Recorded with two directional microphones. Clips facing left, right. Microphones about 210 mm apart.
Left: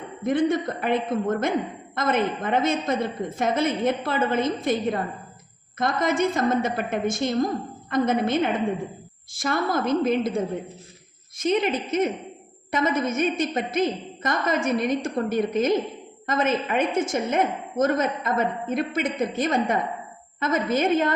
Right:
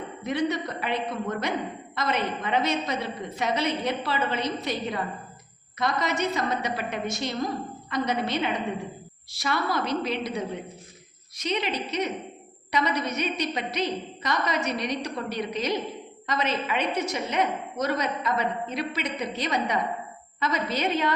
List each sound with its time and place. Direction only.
0.2 s a woman's voice: 50° left (ahead or behind)